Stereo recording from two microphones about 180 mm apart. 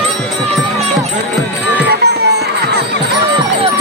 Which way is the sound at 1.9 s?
65° right (ahead or behind).